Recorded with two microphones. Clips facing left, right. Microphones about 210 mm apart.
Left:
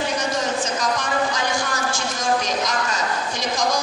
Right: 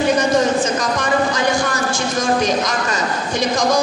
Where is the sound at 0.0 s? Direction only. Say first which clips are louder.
Right 8 dB; 55° right (ahead or behind).